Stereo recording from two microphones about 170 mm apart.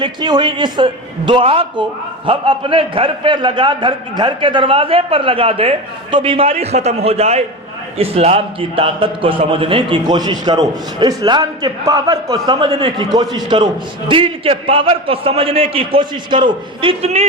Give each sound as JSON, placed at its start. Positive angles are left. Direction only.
{"t": 0.0, "sound": "a man's voice", "side_deg": -25}